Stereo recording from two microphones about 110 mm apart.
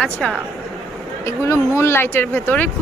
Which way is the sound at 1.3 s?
25° left (ahead or behind).